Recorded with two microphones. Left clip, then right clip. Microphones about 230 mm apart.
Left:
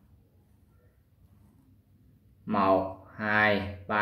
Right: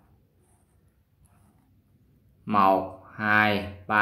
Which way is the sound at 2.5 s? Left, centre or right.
Right.